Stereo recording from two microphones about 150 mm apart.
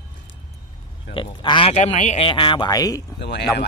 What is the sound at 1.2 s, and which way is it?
Speech, 35° left (ahead or behind).